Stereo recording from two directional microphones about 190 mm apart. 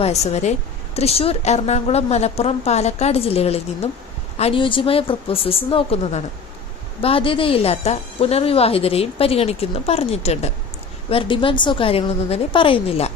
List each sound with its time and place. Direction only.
0.0 s a woman's voice: 35° left (ahead or behind)